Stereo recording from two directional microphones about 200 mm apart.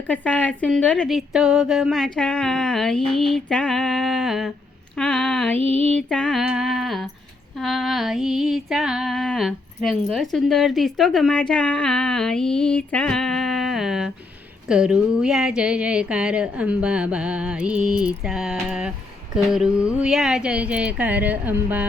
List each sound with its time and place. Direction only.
0.1 s a woman's voice: 5° left (ahead or behind)
4.9 s a sound: centre (ahead or behind)
5.5 s music: 30° right (ahead or behind)
6.0 s a woman's voice: 5° left (ahead or behind)